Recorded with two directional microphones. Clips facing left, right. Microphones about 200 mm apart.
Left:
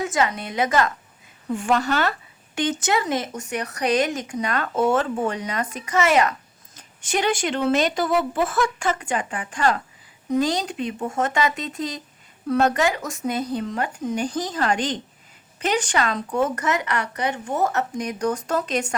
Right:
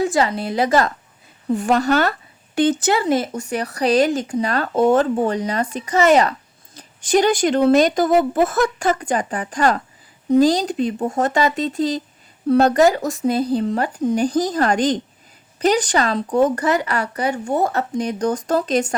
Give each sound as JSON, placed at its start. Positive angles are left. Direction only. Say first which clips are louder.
{"t": 0.0, "sound": "speech", "louder": "right 5 dB", "side_deg": -35}